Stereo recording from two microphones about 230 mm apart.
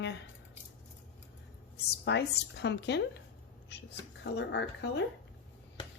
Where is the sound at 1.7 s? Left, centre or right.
Left.